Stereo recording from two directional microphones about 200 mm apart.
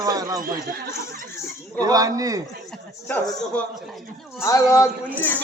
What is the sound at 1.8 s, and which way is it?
Speech, 20° right (ahead or behind).